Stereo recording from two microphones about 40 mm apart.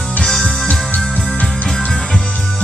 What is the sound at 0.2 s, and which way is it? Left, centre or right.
Music, centre.